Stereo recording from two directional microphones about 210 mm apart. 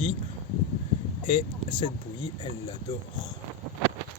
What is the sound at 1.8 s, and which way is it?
Speech, 20° left (ahead or behind).